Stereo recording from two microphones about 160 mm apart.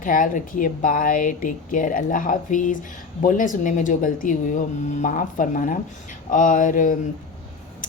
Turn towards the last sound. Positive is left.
turn(degrees=55)  # may be behind; listen again after turning